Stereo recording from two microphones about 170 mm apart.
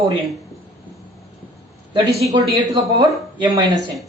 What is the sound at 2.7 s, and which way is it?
Speech, 20° right (ahead or behind).